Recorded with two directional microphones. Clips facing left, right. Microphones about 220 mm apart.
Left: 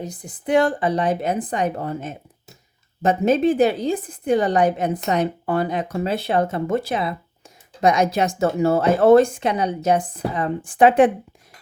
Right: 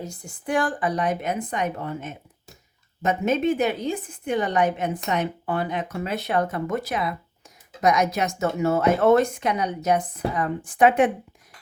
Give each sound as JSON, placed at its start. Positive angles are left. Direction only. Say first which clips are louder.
{"t": 0.0, "sound": "a woman's voice", "louder": "left 4 dB", "side_deg": 20}